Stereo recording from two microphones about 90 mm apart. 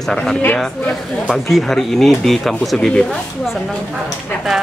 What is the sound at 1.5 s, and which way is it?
Speech, 5° left (ahead or behind).